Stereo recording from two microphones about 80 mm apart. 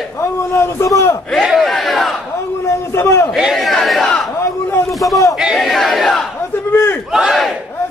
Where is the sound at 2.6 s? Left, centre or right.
Left.